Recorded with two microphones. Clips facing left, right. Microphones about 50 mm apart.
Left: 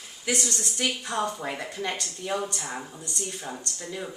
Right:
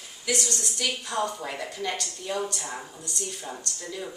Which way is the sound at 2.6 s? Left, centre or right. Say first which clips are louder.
Left 1 dB; centre.